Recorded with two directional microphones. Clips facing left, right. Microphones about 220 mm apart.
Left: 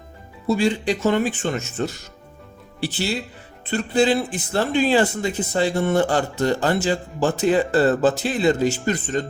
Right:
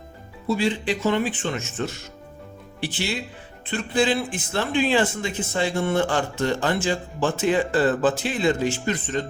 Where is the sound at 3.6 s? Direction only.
40° left (ahead or behind).